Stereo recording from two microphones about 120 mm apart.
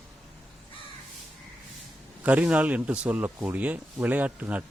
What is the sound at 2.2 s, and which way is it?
Speech, 10° right (ahead or behind).